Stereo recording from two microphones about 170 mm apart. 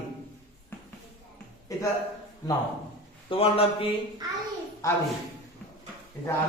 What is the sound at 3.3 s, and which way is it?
Speech, 35° left (ahead or behind).